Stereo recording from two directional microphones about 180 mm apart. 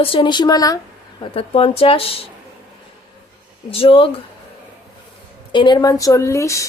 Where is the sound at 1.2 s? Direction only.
30° left (ahead or behind).